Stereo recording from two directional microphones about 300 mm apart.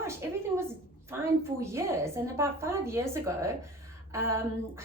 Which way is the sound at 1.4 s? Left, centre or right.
Centre.